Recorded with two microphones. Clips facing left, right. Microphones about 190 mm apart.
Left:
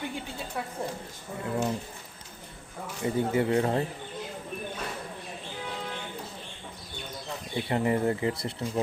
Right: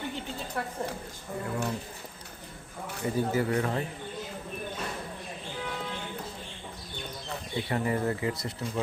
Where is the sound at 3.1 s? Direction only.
25° left (ahead or behind).